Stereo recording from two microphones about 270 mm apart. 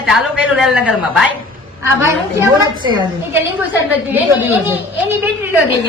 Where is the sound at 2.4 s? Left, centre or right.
Centre.